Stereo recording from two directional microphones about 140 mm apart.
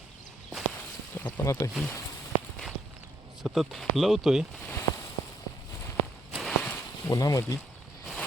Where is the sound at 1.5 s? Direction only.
20° left (ahead or behind).